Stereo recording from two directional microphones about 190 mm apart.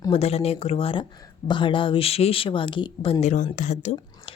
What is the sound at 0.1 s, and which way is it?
A woman's voice, 30° left (ahead or behind).